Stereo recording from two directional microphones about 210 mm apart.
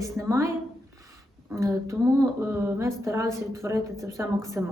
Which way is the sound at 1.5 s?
15° right (ahead or behind).